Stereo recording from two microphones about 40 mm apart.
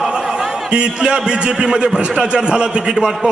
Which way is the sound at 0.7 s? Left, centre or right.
Right.